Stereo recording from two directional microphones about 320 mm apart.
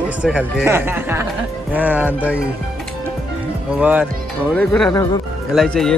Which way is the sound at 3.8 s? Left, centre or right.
Centre.